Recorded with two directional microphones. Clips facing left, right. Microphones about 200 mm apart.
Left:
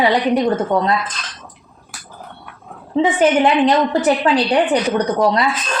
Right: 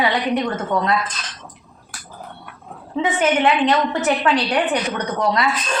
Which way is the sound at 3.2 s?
35° left (ahead or behind).